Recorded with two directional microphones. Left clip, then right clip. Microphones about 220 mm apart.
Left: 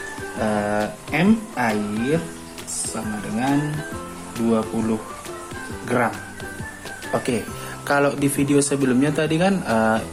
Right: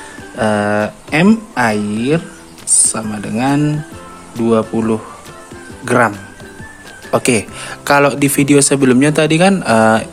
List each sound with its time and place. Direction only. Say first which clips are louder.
0.3 s speech: right 8 dB; 50° right (ahead or behind)
7.1 s speech: right 10 dB; 45° right (ahead or behind)
7.9 s speech: right 8 dB; 35° right (ahead or behind)